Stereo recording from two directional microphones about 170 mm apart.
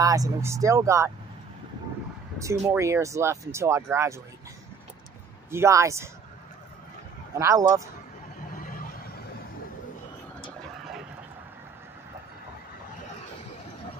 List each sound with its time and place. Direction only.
0.0 s speech: 20° right (ahead or behind)
2.3 s speech: 15° right (ahead or behind)
5.5 s speech: 15° right (ahead or behind)
7.3 s speech: 20° right (ahead or behind)
8.5 s a sound: 55° left (ahead or behind)